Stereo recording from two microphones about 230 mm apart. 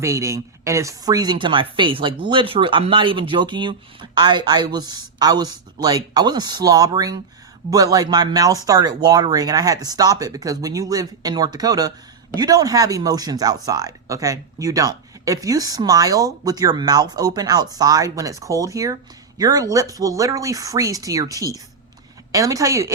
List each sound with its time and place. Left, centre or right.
0.0 s speech: centre